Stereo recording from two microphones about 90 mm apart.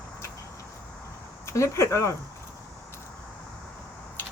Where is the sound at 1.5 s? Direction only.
35° left (ahead or behind).